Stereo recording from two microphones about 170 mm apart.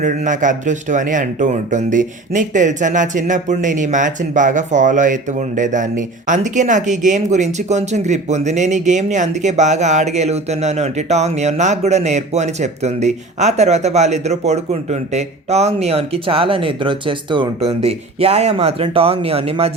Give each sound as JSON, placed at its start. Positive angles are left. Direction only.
{"t": 0.0, "sound": "speech", "side_deg": -50}